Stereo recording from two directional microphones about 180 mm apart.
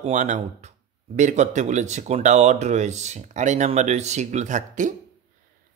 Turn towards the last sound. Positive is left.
turn(degrees=-45)  # may be behind; listen again after turning